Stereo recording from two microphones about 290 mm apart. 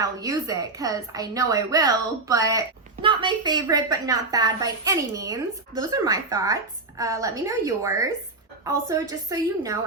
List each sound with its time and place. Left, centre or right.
0.0 s speech: centre